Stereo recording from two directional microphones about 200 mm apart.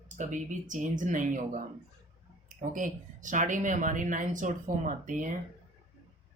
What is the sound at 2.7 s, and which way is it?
Speech, 40° right (ahead or behind).